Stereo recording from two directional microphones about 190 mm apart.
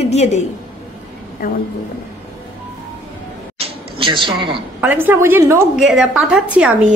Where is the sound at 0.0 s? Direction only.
35° left (ahead or behind).